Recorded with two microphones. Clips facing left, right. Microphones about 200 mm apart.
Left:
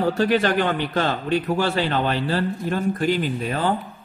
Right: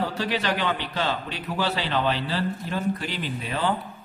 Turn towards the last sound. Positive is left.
turn(degrees=45)  # may be behind; listen again after turning